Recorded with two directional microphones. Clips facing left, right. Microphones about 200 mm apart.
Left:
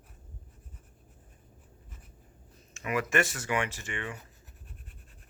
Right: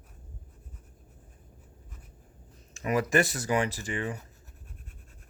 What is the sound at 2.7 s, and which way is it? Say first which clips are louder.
Speech: right 4 dB; 40° right (ahead or behind).